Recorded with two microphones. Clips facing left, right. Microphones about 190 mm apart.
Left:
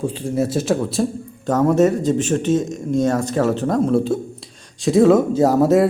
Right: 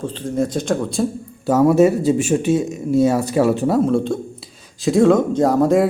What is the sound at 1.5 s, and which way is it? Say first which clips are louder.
Speech: right 2 dB; 10° right (ahead or behind).